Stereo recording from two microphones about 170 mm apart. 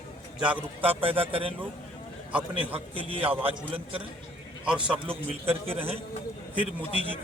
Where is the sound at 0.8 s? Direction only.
35° right (ahead or behind).